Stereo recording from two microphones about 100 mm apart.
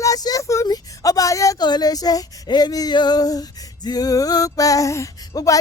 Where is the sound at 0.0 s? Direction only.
35° left (ahead or behind).